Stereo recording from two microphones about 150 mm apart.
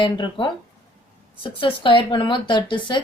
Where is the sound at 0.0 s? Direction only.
30° left (ahead or behind).